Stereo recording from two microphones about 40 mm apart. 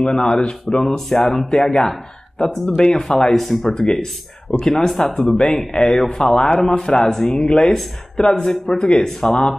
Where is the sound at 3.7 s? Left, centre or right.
Centre.